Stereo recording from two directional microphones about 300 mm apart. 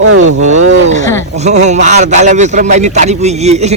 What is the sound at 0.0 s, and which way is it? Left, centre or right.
Speech, right.